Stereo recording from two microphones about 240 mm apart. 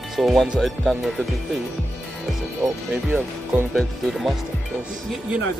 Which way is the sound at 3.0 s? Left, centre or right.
Centre.